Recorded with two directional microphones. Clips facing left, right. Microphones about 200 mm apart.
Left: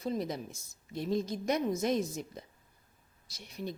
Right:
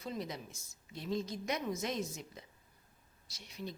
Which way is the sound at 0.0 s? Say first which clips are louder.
Left 7 dB; 40° left (ahead or behind).